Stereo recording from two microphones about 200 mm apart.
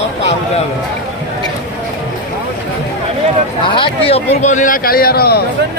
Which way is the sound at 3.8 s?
30° left (ahead or behind).